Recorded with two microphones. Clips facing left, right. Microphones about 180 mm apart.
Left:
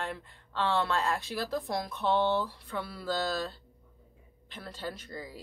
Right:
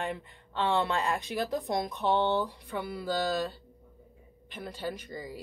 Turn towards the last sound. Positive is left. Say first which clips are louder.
# right 3 dB
turn(degrees=-15)  # may be behind; listen again after turning